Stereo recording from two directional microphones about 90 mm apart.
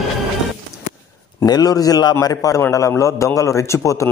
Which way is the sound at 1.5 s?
45° left (ahead or behind).